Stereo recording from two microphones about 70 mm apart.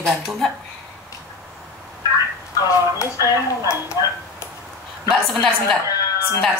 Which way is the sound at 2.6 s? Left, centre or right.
Left.